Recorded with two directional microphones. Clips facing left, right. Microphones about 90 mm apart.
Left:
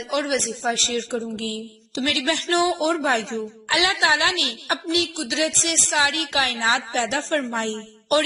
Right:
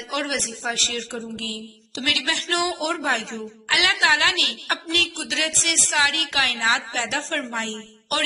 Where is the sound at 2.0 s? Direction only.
30° left (ahead or behind).